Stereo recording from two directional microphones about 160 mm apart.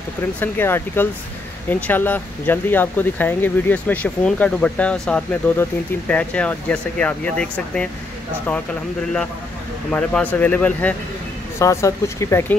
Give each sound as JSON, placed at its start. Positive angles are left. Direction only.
{"t": 0.4, "sound": "speech", "side_deg": 15}
{"t": 9.8, "sound": "speech", "side_deg": 10}